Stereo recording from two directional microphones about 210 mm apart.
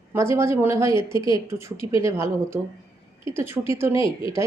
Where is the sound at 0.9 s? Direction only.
25° left (ahead or behind).